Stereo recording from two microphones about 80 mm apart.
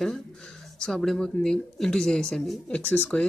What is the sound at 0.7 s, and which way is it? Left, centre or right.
Speech, centre.